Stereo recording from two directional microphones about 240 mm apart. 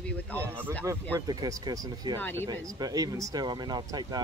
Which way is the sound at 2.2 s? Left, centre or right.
Centre.